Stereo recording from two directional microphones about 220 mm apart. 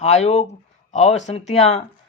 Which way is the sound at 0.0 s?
30° left (ahead or behind).